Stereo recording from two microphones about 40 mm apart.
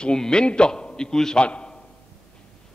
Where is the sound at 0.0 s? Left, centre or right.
Left.